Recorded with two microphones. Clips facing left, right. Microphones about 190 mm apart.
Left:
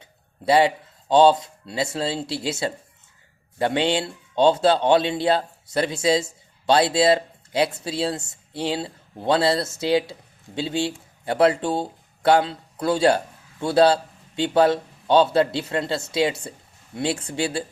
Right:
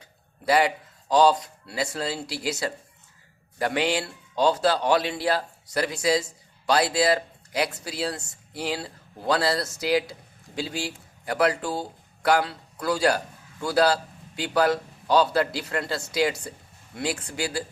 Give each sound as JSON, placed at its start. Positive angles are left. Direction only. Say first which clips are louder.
{"t": 0.0, "sound": "speech", "louder": "left 3 dB", "side_deg": 25}